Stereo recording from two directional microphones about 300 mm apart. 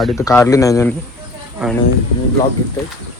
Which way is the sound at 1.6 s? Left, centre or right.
Centre.